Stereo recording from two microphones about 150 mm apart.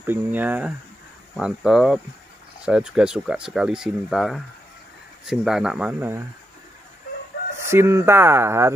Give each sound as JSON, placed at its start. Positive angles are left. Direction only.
{"t": 0.0, "sound": "speech", "side_deg": -15}
{"t": 7.5, "sound": "speech", "side_deg": -15}